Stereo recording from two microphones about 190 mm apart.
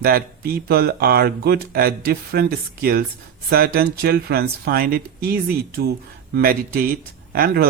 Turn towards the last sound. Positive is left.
turn(degrees=-55)  # may be behind; listen again after turning